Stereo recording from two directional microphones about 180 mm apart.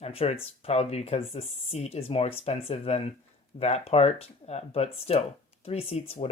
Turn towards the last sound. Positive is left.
turn(degrees=35)  # may be behind; listen again after turning